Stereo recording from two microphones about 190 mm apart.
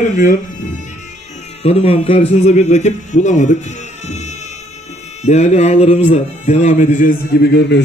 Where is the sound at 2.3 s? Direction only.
35° left (ahead or behind).